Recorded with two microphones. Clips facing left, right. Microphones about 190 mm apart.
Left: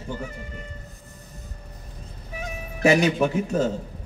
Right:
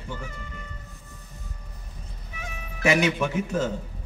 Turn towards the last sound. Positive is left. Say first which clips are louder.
# left 3 dB
turn(degrees=35)  # may be behind; listen again after turning